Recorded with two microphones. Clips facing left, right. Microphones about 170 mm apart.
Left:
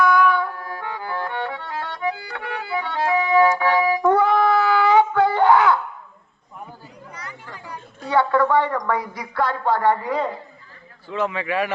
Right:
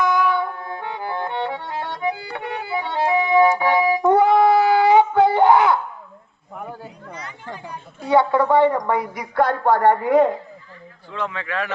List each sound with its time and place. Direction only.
0.0 s music: 20° right (ahead or behind)
6.5 s chatter: 60° right (ahead or behind)
7.1 s a sound: 20° right (ahead or behind)
9.3 s speech: 50° right (ahead or behind)
11.1 s speech: 10° left (ahead or behind)